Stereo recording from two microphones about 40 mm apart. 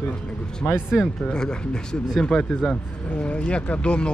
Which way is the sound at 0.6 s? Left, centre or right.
Left.